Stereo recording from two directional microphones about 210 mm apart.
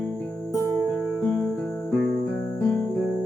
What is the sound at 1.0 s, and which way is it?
Music, centre (ahead or behind).